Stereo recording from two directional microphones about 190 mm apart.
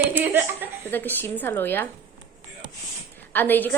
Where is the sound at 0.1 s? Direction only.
10° right (ahead or behind).